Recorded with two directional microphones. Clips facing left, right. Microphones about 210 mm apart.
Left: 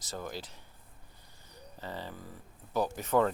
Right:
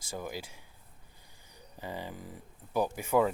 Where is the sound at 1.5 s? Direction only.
15° right (ahead or behind).